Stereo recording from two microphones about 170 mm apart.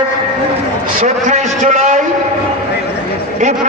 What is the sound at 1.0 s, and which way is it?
A man's voice, 45° right (ahead or behind).